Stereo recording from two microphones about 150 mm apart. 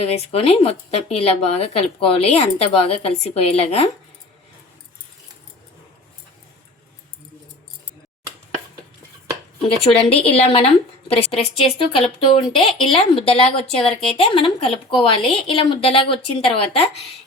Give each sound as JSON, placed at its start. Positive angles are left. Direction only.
{"t": 0.0, "sound": "a woman's voice", "side_deg": 45}
{"t": 9.6, "sound": "a woman's voice", "side_deg": 40}